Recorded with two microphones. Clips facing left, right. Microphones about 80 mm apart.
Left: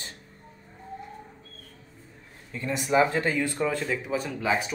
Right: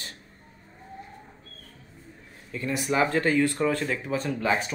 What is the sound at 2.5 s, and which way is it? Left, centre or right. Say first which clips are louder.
Speech: right 1 dB; left.